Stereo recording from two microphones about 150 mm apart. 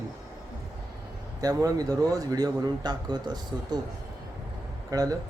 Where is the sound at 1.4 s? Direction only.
25° right (ahead or behind).